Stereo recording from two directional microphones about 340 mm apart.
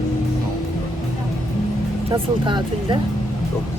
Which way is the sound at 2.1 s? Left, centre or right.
Centre.